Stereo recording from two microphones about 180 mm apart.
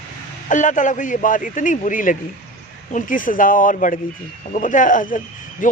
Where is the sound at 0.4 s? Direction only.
45° left (ahead or behind).